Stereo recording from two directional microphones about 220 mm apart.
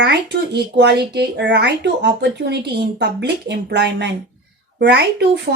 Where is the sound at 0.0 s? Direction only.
50° right (ahead or behind).